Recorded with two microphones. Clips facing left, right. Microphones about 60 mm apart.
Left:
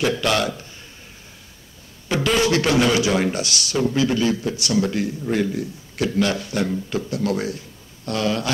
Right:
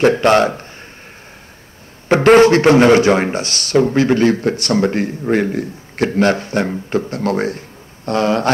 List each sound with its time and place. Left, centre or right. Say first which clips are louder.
0.0 s a man's voice: right 9 dB; right
2.0 s speech: right 11 dB; right